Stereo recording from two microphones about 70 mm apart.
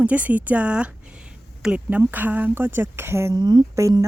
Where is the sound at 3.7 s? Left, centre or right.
Right.